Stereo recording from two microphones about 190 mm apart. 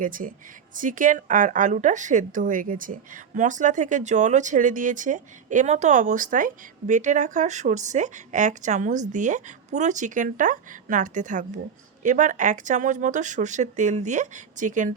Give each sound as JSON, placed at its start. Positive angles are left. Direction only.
{"t": 0.0, "sound": "a woman's voice", "side_deg": -45}